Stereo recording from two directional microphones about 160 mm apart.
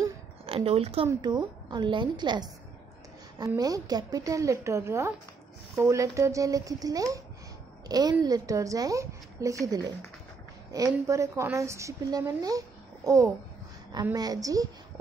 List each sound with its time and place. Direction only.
0.5 s a woman's voice: 40° right (ahead or behind)
1.2 s a woman's voice: 25° right (ahead or behind)